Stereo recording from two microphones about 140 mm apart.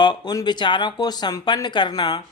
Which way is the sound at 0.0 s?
30° left (ahead or behind).